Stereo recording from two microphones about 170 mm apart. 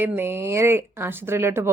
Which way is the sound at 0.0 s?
15° right (ahead or behind).